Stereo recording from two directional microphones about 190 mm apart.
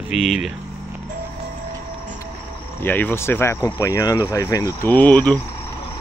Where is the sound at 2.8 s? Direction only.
10° left (ahead or behind).